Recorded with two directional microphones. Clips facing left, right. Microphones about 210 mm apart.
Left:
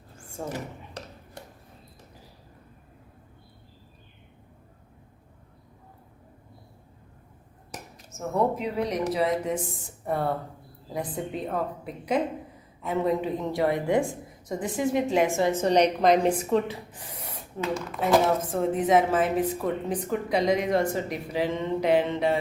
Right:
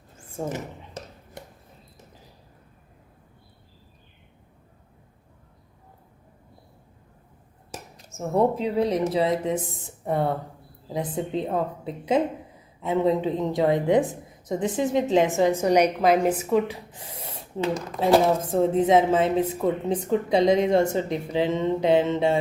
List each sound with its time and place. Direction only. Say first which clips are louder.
0.3 s a sound: right 3 dB; 20° right (ahead or behind)
8.3 s speech: right 4 dB; 30° right (ahead or behind); by 16.7 s 10° right (ahead or behind)
17.2 s speech: right 4 dB; 30° right (ahead or behind)